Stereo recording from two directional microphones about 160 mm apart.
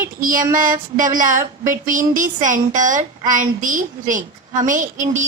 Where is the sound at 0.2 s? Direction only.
60° right (ahead or behind).